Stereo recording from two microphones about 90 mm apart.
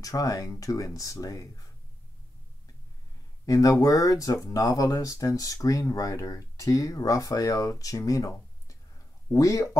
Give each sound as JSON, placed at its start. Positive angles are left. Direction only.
{"t": 0.0, "sound": "speech", "side_deg": 40}
{"t": 3.4, "sound": "speech", "side_deg": 40}